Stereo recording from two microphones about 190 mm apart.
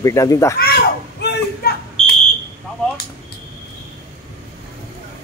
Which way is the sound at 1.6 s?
55° left (ahead or behind).